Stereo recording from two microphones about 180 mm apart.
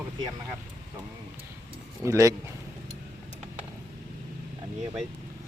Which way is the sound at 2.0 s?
15° right (ahead or behind).